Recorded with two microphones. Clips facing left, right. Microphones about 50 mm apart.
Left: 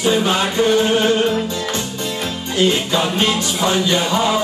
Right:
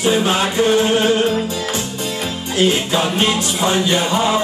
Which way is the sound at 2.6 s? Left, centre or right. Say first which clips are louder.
Even; centre.